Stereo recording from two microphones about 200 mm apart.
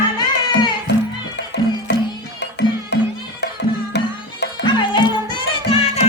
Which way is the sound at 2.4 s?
60° left (ahead or behind).